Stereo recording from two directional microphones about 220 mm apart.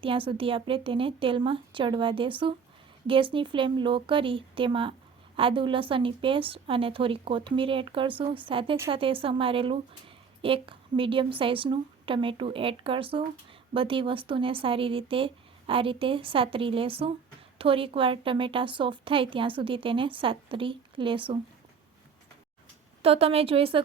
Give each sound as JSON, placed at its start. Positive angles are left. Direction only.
{"t": 0.0, "sound": "a woman's voice", "side_deg": -25}
{"t": 23.0, "sound": "a woman's voice", "side_deg": -25}